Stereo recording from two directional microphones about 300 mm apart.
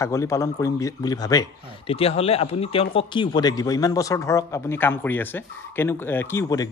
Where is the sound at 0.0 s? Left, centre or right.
Centre.